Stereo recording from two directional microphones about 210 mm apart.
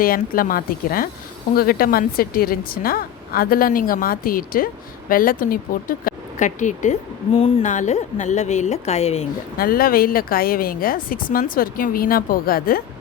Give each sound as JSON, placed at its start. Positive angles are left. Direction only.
{"t": 0.0, "sound": "a woman's voice", "side_deg": 45}
{"t": 9.6, "sound": "a woman's voice", "side_deg": 45}